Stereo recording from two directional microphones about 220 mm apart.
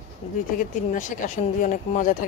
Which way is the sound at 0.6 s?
35° left (ahead or behind).